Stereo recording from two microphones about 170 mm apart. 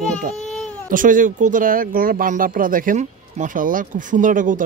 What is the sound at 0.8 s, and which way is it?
Speech, 50° right (ahead or behind).